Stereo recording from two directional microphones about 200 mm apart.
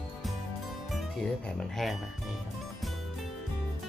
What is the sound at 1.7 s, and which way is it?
Speech, centre (ahead or behind).